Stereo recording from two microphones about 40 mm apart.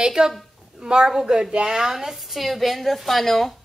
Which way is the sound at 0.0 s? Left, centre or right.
Centre.